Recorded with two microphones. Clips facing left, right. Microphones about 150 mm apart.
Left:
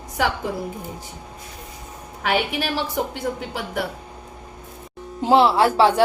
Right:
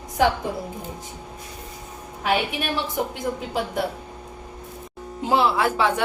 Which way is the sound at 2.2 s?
80° left.